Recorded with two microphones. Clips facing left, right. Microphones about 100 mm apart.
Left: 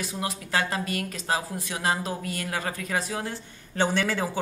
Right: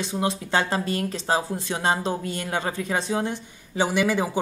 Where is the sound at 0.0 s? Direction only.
25° right (ahead or behind).